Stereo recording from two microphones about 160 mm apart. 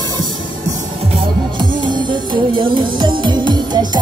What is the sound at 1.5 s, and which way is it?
Music, 30° right (ahead or behind).